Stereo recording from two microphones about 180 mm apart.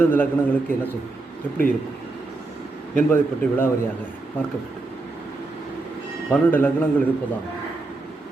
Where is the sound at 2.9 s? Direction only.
10° left (ahead or behind).